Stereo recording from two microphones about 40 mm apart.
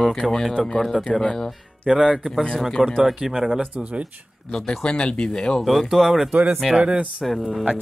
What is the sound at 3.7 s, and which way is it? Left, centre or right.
Speech, right.